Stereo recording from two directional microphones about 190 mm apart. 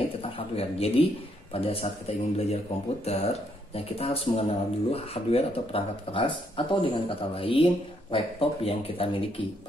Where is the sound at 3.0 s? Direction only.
35° left (ahead or behind).